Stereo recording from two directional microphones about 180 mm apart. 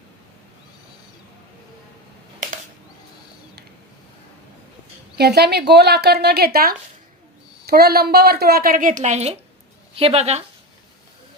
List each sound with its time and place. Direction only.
5.1 s a woman's voice: 65° right (ahead or behind); by 10.4 s 35° right (ahead or behind)